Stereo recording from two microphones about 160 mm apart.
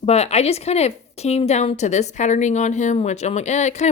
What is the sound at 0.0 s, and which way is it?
A woman's voice, 40° left (ahead or behind).